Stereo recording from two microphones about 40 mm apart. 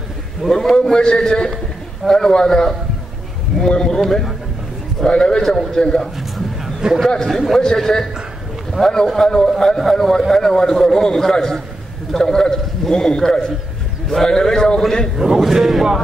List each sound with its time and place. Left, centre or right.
0.4 s a man's voice: centre
0.7 s a man's voice: centre
5.0 s a man's voice: centre
6.1 s a sound: centre
7.2 s a man's voice: centre
15.3 s a man's voice: centre